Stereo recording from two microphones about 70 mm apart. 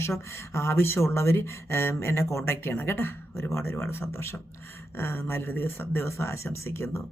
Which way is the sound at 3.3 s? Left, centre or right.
Left.